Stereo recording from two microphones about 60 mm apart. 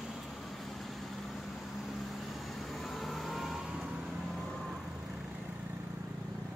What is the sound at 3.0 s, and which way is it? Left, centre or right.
Vehicle, centre.